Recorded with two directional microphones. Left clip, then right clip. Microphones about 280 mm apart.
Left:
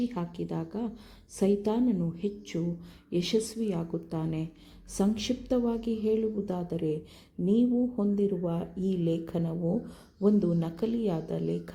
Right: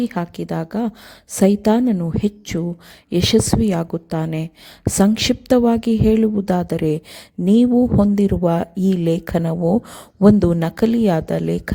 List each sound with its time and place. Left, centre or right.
0.0 s speech: right